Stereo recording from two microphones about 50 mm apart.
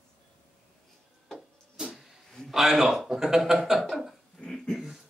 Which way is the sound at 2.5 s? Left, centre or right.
Centre.